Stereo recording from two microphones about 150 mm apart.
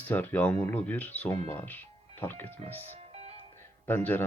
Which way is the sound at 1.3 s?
45° right (ahead or behind).